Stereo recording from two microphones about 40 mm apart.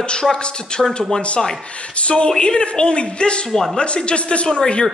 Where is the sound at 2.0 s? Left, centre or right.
Left.